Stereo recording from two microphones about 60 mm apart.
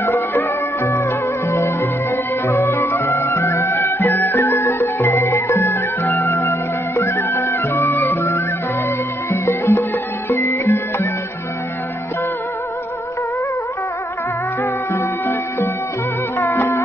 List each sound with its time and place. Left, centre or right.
0.0 s music: left
14.6 s music: left